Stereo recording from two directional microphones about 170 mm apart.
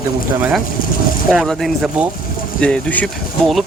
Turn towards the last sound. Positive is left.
turn(degrees=0)  # may be behind; listen again after turning